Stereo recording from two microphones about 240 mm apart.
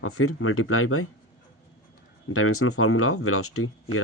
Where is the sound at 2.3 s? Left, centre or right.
Left.